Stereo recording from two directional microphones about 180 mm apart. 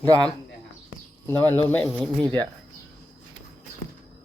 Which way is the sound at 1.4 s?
10° left (ahead or behind).